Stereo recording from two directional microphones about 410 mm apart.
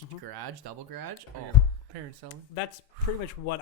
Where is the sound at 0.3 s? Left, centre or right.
Right.